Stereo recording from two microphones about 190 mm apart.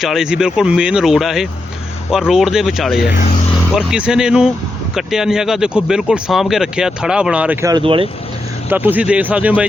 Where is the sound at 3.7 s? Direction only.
5° right (ahead or behind).